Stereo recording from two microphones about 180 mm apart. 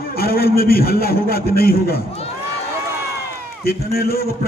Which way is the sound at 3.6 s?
60° left (ahead or behind).